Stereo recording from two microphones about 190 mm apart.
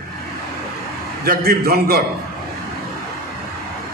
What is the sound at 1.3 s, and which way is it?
Speech, 55° right (ahead or behind).